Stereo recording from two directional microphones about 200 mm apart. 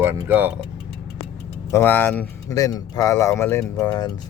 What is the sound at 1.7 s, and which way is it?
Speech, 10° left (ahead or behind).